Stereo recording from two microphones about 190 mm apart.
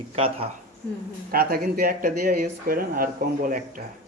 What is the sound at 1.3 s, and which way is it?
Speech, 50° right (ahead or behind).